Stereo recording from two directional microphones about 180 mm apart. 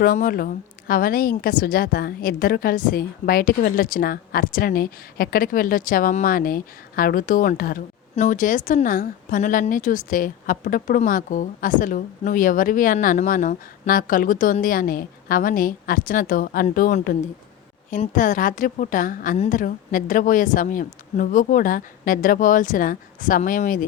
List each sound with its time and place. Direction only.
0.0 s speech: 50° left (ahead or behind)